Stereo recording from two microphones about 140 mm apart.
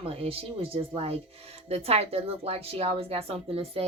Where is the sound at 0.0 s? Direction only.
45° right (ahead or behind).